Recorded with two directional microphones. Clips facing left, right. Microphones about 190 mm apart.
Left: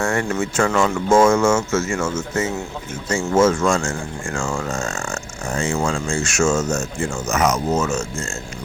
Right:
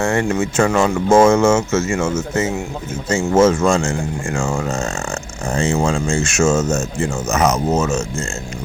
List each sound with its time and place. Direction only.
0.0 s speech: 25° right (ahead or behind)